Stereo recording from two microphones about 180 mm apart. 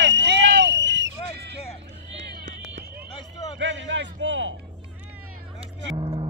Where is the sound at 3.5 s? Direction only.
90° right.